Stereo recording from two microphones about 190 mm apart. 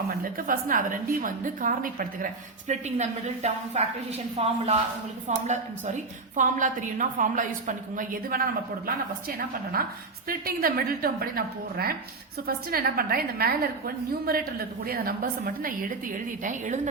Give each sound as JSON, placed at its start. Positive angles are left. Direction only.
{"t": 0.2, "sound": "a woman's voice", "side_deg": -50}
{"t": 9.7, "sound": "a woman's voice", "side_deg": -50}